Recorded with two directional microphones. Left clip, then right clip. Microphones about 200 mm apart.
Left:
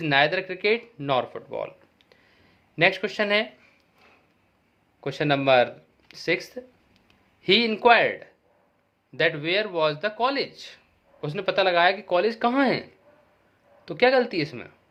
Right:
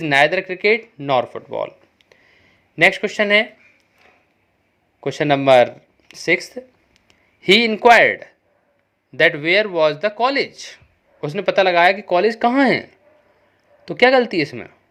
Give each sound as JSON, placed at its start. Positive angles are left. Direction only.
{"t": 0.0, "sound": "speech", "side_deg": -25}
{"t": 0.9, "sound": "a sound", "side_deg": -20}
{"t": 4.9, "sound": "speech", "side_deg": -30}